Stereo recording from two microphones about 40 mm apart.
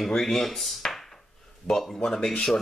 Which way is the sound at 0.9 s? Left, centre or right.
Centre.